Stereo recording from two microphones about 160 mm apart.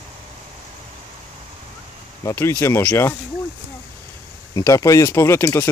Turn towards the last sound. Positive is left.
turn(degrees=15)  # may be behind; listen again after turning